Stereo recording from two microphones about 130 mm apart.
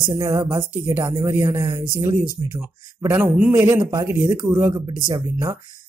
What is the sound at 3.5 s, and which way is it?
Speech, 20° right (ahead or behind).